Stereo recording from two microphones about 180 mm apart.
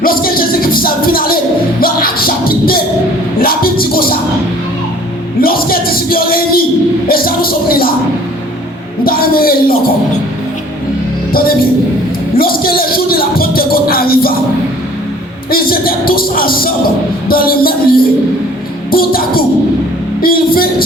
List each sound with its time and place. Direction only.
0.0 s music: 55° left (ahead or behind)
5.4 s music: 55° left (ahead or behind)
9.0 s a sound: 55° left (ahead or behind)
11.3 s speech: 55° left (ahead or behind)
12.4 s music: 55° left (ahead or behind)
15.4 s a man's voice: 55° left (ahead or behind)